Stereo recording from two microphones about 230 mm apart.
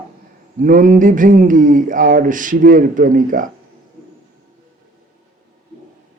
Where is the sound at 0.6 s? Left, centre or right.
Right.